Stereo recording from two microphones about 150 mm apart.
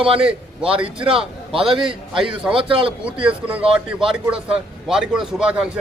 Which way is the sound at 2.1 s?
5° right (ahead or behind).